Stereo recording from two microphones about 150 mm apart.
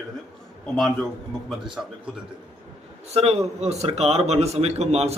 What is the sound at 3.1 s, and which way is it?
A man's voice, 45° right (ahead or behind).